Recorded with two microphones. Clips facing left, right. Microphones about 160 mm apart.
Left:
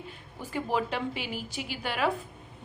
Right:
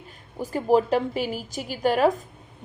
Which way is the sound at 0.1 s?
40° right (ahead or behind).